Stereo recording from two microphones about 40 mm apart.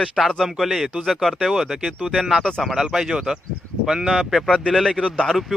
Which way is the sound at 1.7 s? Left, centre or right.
Centre.